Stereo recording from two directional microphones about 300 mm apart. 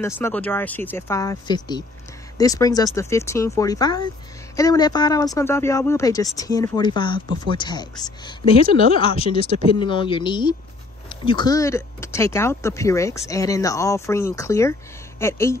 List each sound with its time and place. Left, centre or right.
0.0 s a woman's voice: centre